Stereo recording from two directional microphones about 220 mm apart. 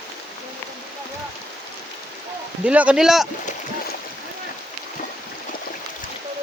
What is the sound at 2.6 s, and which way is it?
Speech, 5° right (ahead or behind).